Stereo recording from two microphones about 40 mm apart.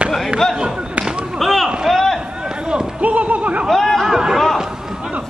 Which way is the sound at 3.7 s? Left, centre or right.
Centre.